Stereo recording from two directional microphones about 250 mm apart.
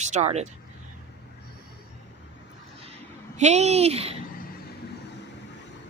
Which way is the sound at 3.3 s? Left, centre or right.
Right.